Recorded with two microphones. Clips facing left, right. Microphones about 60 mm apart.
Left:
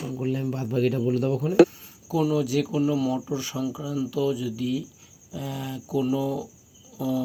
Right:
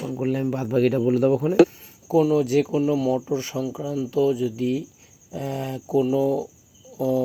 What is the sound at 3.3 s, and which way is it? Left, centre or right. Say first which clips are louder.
Speech: right 3 dB; right.